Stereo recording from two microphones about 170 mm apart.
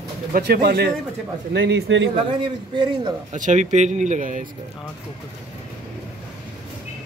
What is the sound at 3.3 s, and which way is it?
Speech, 45° right (ahead or behind).